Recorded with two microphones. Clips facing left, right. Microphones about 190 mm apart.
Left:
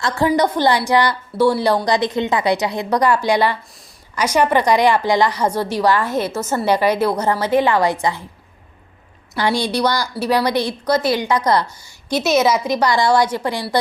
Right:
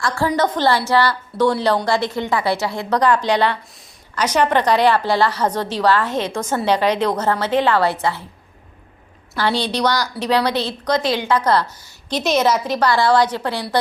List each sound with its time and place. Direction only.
0.0 s a woman's voice: 20° left (ahead or behind)
9.3 s a woman's voice: 15° left (ahead or behind)